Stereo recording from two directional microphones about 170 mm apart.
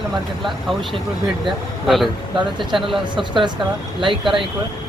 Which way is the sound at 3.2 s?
30° right (ahead or behind).